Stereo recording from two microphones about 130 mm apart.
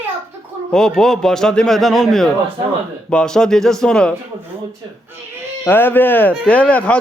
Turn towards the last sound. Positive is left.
turn(degrees=10)  # may be behind; listen again after turning